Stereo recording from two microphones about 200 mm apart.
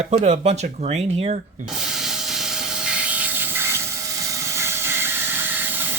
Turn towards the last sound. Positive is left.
turn(degrees=-10)  # may be behind; listen again after turning